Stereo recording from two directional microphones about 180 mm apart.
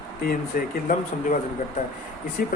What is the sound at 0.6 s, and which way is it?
Speech, 50° left (ahead or behind).